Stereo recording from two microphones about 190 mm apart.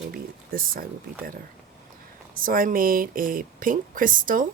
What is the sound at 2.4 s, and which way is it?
Speech, 45° right (ahead or behind).